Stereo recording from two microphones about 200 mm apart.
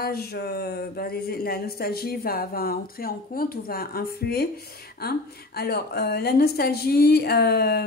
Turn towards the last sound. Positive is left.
turn(degrees=50)  # may be behind; listen again after turning